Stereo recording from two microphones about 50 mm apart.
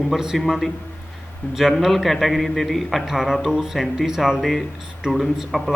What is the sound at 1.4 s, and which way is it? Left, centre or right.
Speech, left.